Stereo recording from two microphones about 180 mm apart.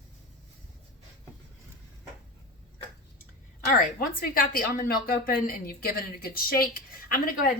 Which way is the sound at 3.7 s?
55° left (ahead or behind).